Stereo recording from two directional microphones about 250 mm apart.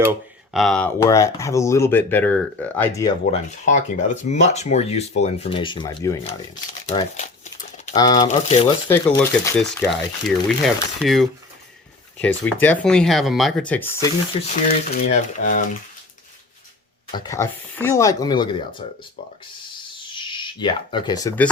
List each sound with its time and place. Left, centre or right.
0.0 s speech: centre
3.2 s speech: left
6.8 s speech: left
7.9 s speech: centre
12.5 s speech: centre
14.7 s speech: left
17.1 s speech: centre
20.1 s speech: centre